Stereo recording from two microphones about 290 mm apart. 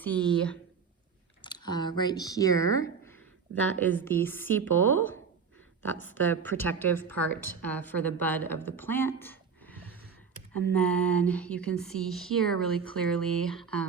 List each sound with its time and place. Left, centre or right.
0.0 s speech: centre
1.4 s a woman's voice: centre